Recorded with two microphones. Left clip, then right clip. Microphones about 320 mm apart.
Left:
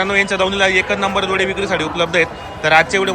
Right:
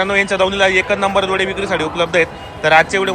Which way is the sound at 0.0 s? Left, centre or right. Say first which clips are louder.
Right 1 dB; centre.